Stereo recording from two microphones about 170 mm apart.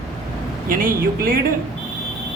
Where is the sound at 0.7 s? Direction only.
55° right (ahead or behind).